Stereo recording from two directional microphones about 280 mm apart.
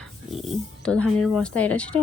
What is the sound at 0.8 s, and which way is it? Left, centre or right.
Speech, centre.